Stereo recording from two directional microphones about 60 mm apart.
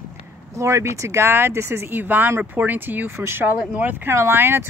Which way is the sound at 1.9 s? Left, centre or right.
Right.